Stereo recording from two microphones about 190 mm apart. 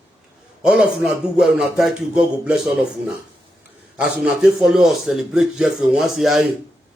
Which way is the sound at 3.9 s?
5° right (ahead or behind).